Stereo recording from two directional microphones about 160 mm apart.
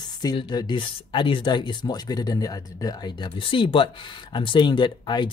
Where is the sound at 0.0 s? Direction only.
25° left (ahead or behind).